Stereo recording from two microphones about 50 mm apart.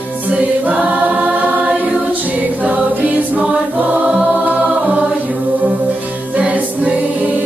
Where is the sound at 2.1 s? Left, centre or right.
Right.